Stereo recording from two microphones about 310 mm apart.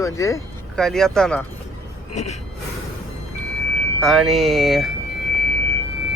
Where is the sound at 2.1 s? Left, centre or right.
Left.